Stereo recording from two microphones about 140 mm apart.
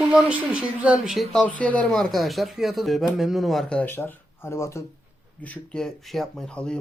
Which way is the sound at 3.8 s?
15° left (ahead or behind).